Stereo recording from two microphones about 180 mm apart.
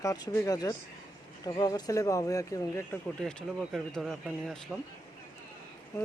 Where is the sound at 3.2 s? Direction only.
Centre (ahead or behind).